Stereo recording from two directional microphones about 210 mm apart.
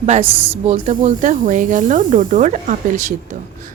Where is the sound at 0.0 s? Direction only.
30° right (ahead or behind).